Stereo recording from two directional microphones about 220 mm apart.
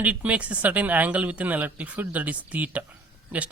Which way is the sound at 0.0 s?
5° right (ahead or behind).